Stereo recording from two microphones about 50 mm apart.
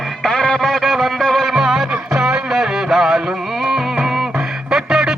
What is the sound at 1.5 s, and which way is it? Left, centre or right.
Music, centre.